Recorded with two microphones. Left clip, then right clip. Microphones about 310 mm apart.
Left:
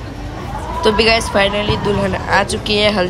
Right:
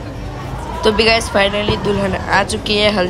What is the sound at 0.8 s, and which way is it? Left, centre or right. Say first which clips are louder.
A woman's voice: even; centre.